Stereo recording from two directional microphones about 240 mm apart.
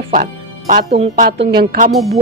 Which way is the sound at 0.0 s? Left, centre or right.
Right.